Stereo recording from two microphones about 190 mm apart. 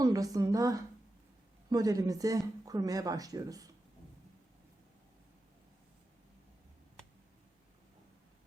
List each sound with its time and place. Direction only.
0.0 s speech: 20° right (ahead or behind)